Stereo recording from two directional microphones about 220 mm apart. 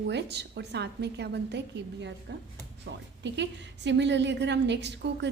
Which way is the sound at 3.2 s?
50° right (ahead or behind).